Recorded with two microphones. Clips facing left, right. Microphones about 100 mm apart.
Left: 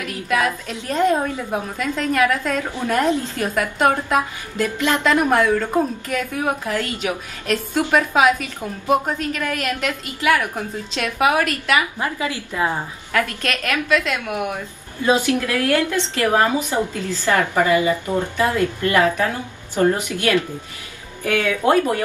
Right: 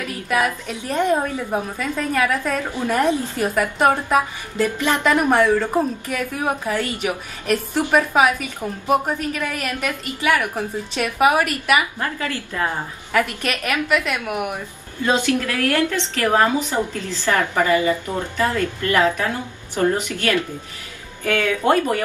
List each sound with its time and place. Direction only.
0.3 s a woman's voice: 10° right (ahead or behind)
6.7 s a woman's voice: 15° right (ahead or behind)
11.0 s a woman's voice: 15° right (ahead or behind)
12.0 s a woman's voice: 15° left (ahead or behind)
13.1 s a woman's voice: 15° right (ahead or behind)
15.0 s a woman's voice: 15° left (ahead or behind)